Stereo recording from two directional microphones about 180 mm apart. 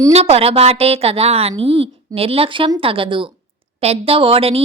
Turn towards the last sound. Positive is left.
turn(degrees=-30)  # may be behind; listen again after turning